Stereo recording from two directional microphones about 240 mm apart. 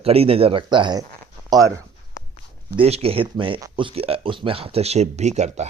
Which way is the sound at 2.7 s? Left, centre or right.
Right.